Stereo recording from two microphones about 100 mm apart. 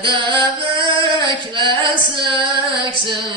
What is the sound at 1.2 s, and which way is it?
Female singing, 55° right (ahead or behind).